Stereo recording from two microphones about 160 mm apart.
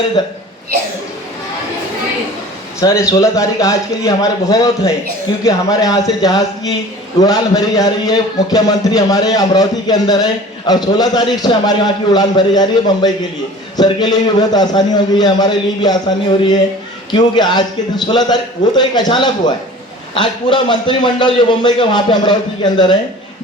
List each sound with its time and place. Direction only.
0.2 s a man's voice: 25° left (ahead or behind)
2.8 s a man's voice: 20° left (ahead or behind)